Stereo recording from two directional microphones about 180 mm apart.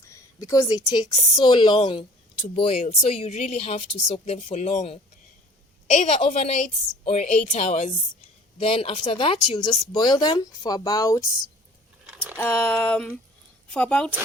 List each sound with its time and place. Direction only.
0.3 s a woman's voice: 20° left (ahead or behind)
12.0 s a sound: 10° right (ahead or behind)
12.4 s speech: 10° left (ahead or behind)